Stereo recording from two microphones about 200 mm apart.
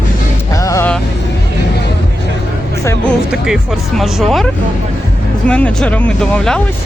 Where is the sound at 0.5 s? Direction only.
15° left (ahead or behind).